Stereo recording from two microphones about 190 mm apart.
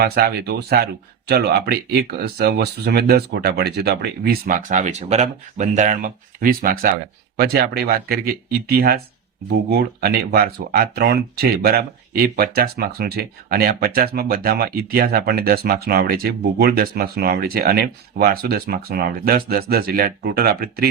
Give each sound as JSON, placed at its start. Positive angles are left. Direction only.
{"t": 0.0, "sound": "speech", "side_deg": -55}